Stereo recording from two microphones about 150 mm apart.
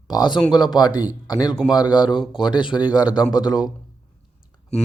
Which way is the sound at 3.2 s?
25° left (ahead or behind).